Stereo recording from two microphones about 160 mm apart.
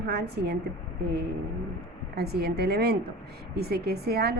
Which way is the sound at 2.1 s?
85° right.